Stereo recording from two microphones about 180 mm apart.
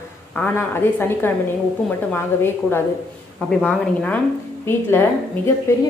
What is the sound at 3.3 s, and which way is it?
Speech, centre (ahead or behind).